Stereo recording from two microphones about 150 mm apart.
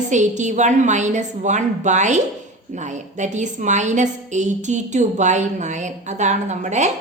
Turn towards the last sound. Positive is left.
turn(degrees=-50)  # may be behind; listen again after turning